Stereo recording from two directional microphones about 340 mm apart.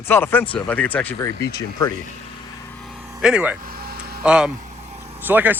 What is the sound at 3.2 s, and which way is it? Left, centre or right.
Speech, centre.